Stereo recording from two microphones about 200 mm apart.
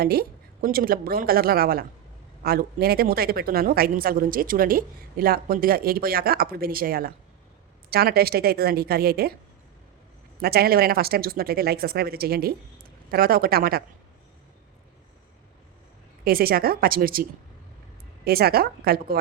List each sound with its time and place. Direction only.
0.0 s a woman's voice: 50° right (ahead or behind)
10.4 s a woman's voice: 50° right (ahead or behind)
16.2 s a woman's voice: 50° right (ahead or behind)
18.3 s a woman's voice: 50° right (ahead or behind)